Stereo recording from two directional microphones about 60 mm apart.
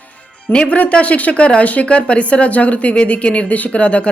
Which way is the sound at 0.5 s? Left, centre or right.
Left.